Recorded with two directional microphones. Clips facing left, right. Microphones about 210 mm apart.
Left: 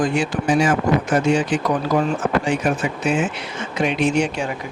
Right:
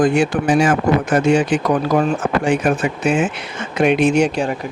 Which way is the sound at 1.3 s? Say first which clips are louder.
Right 5 dB; 55° right (ahead or behind).